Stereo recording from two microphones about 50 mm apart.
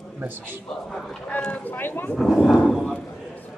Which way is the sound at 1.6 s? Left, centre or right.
Left.